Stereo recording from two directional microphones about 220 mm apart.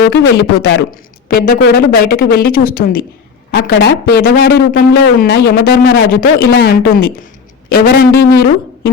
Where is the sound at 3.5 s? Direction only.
55° left (ahead or behind).